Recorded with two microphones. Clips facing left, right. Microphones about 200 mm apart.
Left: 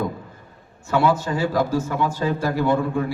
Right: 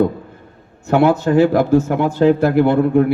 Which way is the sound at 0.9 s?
60° right (ahead or behind).